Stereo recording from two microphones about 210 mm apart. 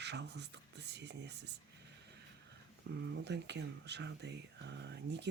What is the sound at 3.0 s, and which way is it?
Speech, 55° right (ahead or behind).